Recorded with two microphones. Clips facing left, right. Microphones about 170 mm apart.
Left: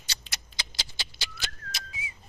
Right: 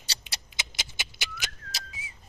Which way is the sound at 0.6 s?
20° right (ahead or behind).